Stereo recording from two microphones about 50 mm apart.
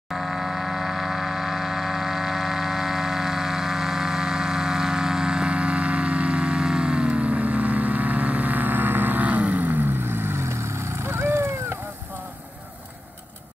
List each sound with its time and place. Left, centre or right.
0.1 s vehicle: centre; by 11.8 s right